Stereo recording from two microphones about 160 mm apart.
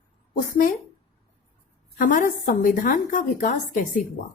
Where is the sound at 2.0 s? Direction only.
55° left (ahead or behind).